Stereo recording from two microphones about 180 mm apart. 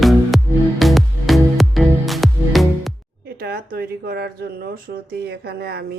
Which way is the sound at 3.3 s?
60° right (ahead or behind).